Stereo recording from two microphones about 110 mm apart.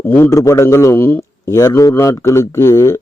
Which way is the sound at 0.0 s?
20° left (ahead or behind).